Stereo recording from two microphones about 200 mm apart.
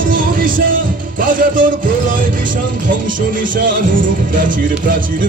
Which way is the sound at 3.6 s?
45° right (ahead or behind).